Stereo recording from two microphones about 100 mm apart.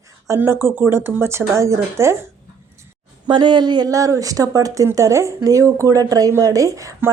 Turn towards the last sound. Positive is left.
turn(degrees=-35)  # may be behind; listen again after turning